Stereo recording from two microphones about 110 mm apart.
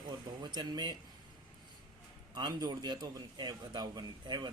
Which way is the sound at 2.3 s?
40° right (ahead or behind).